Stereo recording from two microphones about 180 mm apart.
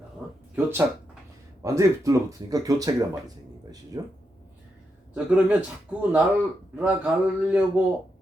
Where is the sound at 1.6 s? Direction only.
15° right (ahead or behind).